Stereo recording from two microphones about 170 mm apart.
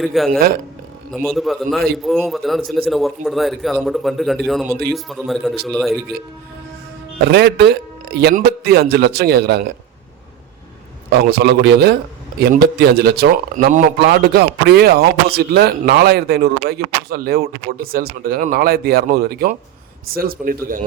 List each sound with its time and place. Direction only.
0.0 s a man's voice: centre (ahead or behind)
7.3 s a man's voice: 75° right (ahead or behind)
11.1 s a man's voice: 70° right (ahead or behind); by 13.8 s 55° right (ahead or behind)
13.8 s a man's voice: 70° right (ahead or behind)